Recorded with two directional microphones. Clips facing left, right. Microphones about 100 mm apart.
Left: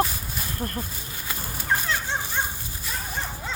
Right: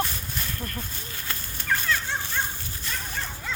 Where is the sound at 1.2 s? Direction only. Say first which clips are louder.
Left 2 dB; 15° left (ahead or behind).